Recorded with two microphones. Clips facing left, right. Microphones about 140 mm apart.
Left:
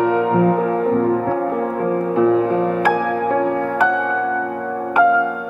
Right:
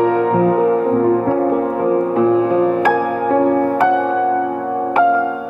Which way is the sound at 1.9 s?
10° right (ahead or behind).